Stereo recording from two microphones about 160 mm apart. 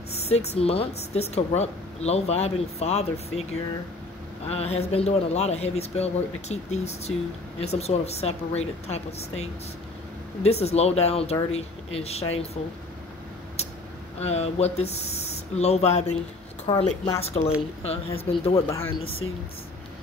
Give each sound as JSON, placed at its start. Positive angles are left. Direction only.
{"t": 0.1, "sound": "a woman's voice", "side_deg": 40}
{"t": 4.5, "sound": "a woman's voice", "side_deg": 40}
{"t": 14.2, "sound": "a woman's voice", "side_deg": 40}
{"t": 16.7, "sound": "a woman's voice", "side_deg": 30}
{"t": 18.5, "sound": "speech", "side_deg": 20}